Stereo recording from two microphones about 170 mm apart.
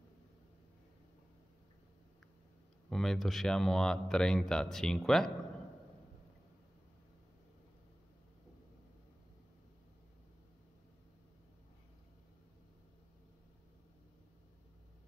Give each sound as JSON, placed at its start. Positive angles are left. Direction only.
{"t": 2.9, "sound": "speech", "side_deg": 0}